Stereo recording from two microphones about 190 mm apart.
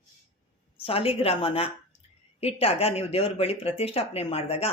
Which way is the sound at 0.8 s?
30° left (ahead or behind).